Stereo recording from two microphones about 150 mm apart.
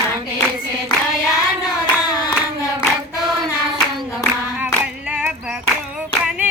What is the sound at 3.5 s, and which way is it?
Clapping, 20° left (ahead or behind).